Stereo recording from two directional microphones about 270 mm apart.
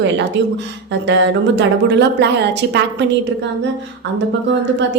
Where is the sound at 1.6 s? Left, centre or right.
Right.